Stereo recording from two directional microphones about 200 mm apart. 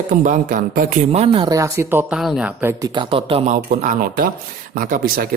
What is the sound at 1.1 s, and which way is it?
Speech, 30° right (ahead or behind).